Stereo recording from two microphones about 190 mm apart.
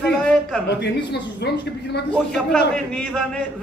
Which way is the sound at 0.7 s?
65° left (ahead or behind).